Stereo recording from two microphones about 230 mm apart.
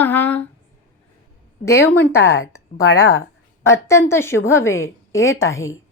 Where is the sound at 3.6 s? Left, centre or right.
Centre.